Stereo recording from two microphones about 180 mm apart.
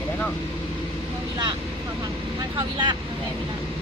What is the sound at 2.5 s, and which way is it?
Speech, 25° right (ahead or behind).